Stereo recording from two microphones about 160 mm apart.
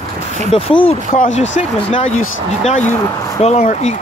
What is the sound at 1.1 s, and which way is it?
Speech, 50° left (ahead or behind).